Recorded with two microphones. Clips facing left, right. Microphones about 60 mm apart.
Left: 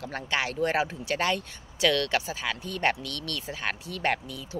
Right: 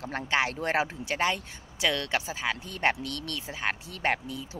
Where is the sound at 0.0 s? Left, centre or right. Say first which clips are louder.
Right 2 dB; right.